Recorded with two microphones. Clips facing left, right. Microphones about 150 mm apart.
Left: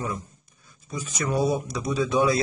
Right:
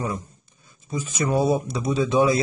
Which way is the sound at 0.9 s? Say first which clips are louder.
Right 4 dB; 25° right (ahead or behind).